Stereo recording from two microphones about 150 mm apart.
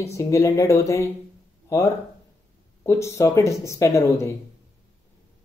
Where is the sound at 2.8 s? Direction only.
20° left (ahead or behind).